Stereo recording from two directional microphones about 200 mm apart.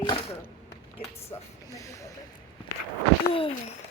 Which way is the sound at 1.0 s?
15° left (ahead or behind).